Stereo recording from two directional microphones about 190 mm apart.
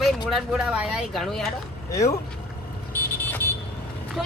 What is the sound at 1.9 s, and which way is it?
Speech, 15° left (ahead or behind).